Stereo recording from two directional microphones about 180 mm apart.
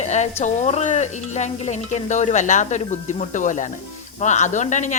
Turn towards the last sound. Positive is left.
turn(degrees=40)  # may be behind; listen again after turning